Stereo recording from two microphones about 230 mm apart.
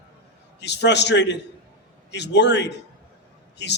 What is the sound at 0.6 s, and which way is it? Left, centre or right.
A man's voice, left.